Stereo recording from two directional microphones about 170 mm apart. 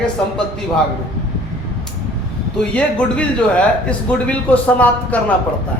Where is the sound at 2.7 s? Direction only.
5° left (ahead or behind).